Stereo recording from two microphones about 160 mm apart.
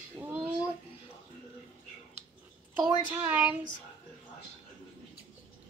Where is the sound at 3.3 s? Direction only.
10° right (ahead or behind).